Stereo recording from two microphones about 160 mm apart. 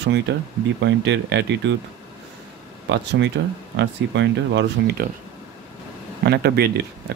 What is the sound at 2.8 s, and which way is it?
Speech, 90° right.